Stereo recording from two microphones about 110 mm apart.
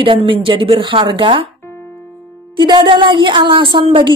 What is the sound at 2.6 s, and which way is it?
Speech, 45° right (ahead or behind).